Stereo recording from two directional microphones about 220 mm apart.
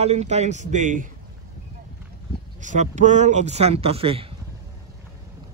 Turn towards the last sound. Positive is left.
turn(degrees=-25)  # may be behind; listen again after turning